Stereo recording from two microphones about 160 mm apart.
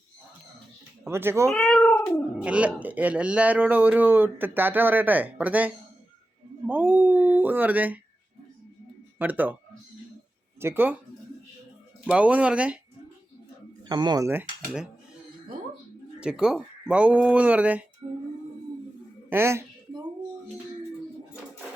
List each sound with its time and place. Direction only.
1.0 s speech: 15° right (ahead or behind)
1.5 s speech: 5° left (ahead or behind)
9.1 s speech: 10° right (ahead or behind)
10.6 s speech: 15° right (ahead or behind)
12.0 s speech: 10° right (ahead or behind)
13.8 s speech: 25° right (ahead or behind)
14.3 s speech: 10° right (ahead or behind)
16.2 s speech: 5° right (ahead or behind)
19.3 s speech: 15° right (ahead or behind)